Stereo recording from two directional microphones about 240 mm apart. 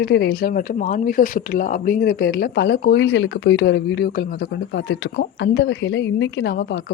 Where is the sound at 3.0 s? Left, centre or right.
Left.